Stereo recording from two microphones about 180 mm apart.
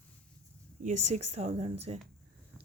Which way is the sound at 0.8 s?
40° right (ahead or behind).